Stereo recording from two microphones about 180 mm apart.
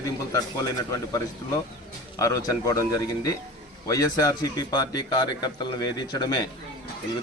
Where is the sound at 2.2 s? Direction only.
20° left (ahead or behind).